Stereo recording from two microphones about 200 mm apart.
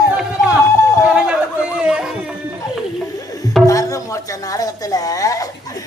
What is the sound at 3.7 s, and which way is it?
A woman's voice, 15° left (ahead or behind).